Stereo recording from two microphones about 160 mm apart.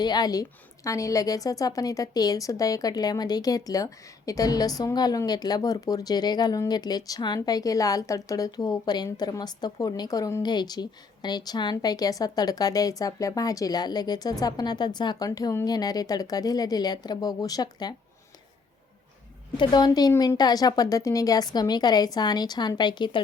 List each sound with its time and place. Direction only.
0.0 s a woman's voice: 25° left (ahead or behind)
19.5 s a woman's voice: 25° left (ahead or behind)